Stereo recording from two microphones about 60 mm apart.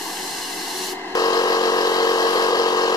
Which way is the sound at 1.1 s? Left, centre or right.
Left.